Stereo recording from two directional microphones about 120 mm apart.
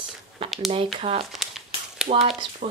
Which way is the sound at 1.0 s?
50° right (ahead or behind).